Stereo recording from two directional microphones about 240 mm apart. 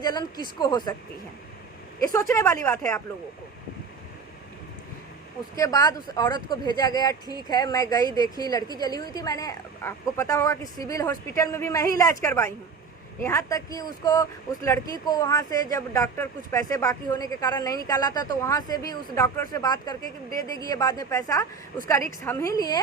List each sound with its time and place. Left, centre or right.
0.0 s speech: centre
2.3 s speech: centre
5.5 s speech: centre